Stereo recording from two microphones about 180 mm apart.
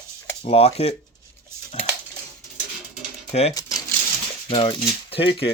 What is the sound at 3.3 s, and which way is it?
Speech, 35° left (ahead or behind).